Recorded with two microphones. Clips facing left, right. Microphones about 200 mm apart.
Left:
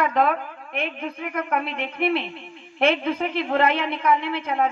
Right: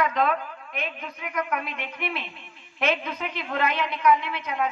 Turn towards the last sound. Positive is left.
turn(degrees=30)  # may be behind; listen again after turning